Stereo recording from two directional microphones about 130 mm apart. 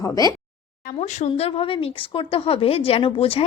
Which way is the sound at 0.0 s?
30° left (ahead or behind).